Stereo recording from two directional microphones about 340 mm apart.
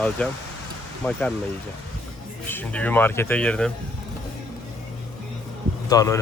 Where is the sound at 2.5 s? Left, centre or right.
Centre.